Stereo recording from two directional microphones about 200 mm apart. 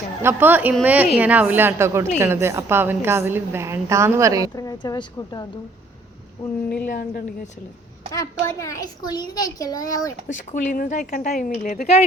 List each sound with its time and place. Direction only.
0.2 s a woman's voice: 10° right (ahead or behind)
4.5 s speech: 20° left (ahead or behind)
6.8 s a woman's voice: 45° left (ahead or behind)
8.1 s a child's voice: 15° left (ahead or behind)
10.3 s speech: 40° left (ahead or behind)